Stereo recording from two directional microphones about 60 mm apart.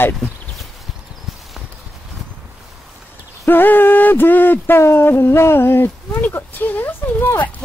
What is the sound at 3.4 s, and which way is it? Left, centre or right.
Speech, left.